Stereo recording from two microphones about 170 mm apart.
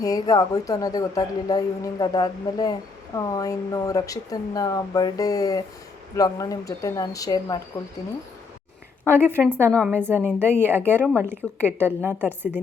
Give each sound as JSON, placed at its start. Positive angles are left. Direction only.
{"t": 0.0, "sound": "speech", "side_deg": 20}
{"t": 9.0, "sound": "a woman's voice", "side_deg": -10}